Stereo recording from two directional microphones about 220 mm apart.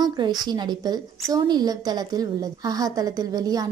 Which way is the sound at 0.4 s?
20° right (ahead or behind).